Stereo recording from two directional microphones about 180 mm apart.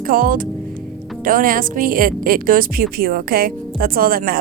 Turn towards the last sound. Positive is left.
turn(degrees=-55)  # may be behind; listen again after turning